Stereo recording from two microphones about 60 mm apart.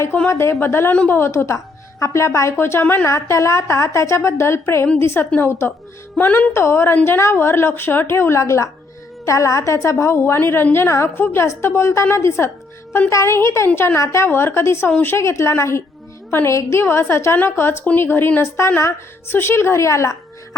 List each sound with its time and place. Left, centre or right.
0.3 s a woman's voice: left
3.1 s a woman's voice: left
6.1 s speech: left
6.5 s a woman's voice: left
14.0 s a woman's voice: left
14.3 s a woman's voice: left
16.8 s a woman's voice: left